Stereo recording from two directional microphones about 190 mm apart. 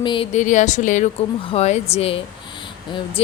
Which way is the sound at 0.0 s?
25° left (ahead or behind).